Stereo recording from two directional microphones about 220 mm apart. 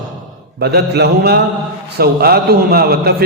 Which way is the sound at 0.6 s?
50° right (ahead or behind).